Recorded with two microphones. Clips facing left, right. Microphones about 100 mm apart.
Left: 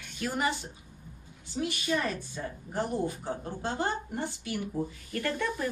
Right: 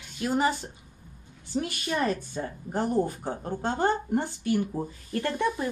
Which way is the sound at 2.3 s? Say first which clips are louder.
Right 4 dB; 45° right (ahead or behind).